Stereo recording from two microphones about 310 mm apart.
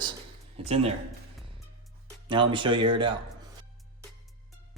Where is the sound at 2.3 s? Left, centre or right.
Centre.